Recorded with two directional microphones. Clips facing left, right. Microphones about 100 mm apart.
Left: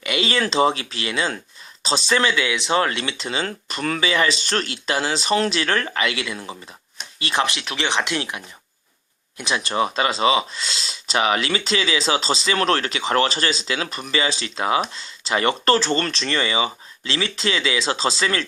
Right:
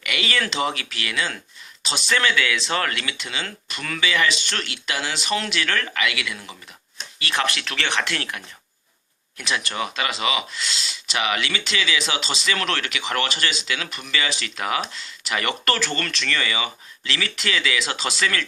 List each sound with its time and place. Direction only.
0.0 s speech: 25° left (ahead or behind)